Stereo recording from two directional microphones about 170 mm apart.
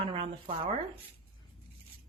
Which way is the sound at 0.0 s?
35° right (ahead or behind).